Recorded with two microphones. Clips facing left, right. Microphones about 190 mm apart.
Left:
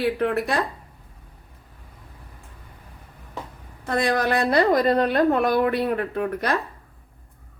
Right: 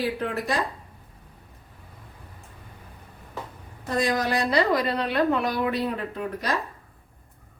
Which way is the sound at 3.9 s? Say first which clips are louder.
Left 3 dB; 60° left (ahead or behind).